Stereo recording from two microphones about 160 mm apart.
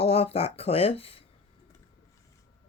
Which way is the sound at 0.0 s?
35° left (ahead or behind).